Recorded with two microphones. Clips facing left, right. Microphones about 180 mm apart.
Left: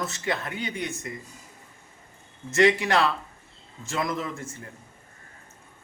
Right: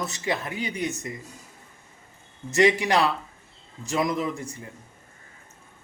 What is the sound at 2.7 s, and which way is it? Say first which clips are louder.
Speech: right 1 dB; 15° right (ahead or behind).